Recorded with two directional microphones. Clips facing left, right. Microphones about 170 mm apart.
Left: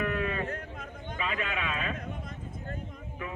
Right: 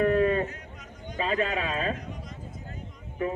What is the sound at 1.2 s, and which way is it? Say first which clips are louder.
Speech: right 6 dB; 35° right (ahead or behind).